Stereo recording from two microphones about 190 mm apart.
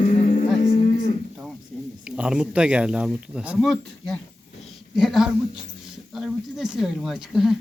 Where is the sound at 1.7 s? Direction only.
5° left (ahead or behind).